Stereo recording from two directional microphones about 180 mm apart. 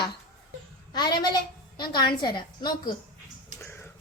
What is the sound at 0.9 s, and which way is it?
A woman's voice, 25° left (ahead or behind).